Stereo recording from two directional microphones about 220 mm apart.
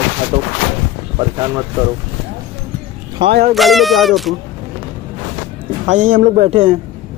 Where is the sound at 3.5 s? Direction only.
Centre (ahead or behind).